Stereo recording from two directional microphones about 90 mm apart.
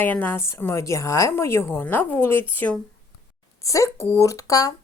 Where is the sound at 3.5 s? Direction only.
35° left (ahead or behind).